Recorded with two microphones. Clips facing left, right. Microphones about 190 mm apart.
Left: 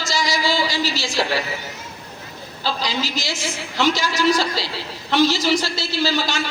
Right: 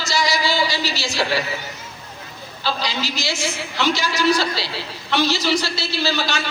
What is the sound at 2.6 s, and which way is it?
A man's voice, 45° left (ahead or behind).